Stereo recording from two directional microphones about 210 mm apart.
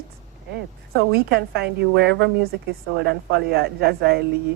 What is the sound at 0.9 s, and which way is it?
A woman's voice, 50° right (ahead or behind).